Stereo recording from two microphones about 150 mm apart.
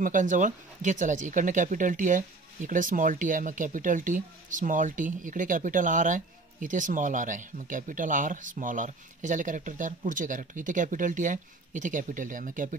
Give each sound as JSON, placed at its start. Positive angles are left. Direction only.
{"t": 0.0, "sound": "speech", "side_deg": -60}